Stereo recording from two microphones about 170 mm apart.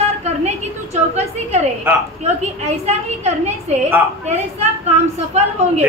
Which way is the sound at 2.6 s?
40° right (ahead or behind).